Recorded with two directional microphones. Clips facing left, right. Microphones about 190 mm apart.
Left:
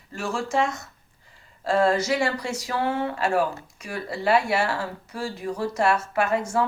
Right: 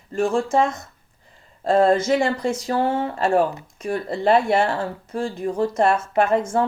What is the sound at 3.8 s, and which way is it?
Speech, 50° right (ahead or behind).